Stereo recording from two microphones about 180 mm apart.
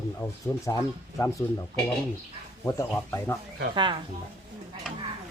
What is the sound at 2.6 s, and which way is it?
Speech, 15° left (ahead or behind).